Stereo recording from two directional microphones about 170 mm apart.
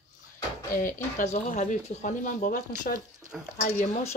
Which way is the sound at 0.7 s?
50° left (ahead or behind).